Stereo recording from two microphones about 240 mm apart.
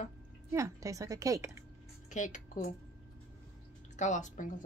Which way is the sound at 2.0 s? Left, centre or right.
Left.